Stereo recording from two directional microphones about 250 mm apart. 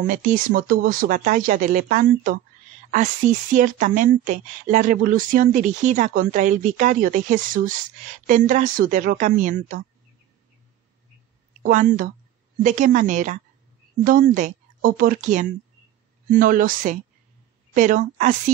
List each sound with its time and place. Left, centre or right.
0.0 s a woman's voice: right
11.6 s a woman's voice: right